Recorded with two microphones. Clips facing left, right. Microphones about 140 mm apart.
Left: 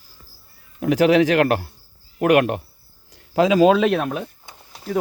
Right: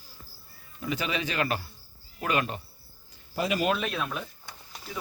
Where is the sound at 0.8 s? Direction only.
80° left.